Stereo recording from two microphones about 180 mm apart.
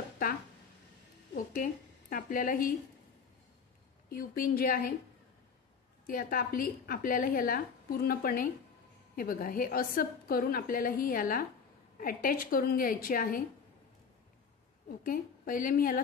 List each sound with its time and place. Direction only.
1.3 s a woman's voice: 50° left (ahead or behind)
4.1 s a woman's voice: 50° left (ahead or behind)
6.0 s a woman's voice: 50° left (ahead or behind)
15.0 s a woman's voice: 50° left (ahead or behind)